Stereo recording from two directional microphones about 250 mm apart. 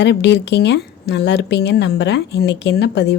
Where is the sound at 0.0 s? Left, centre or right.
Left.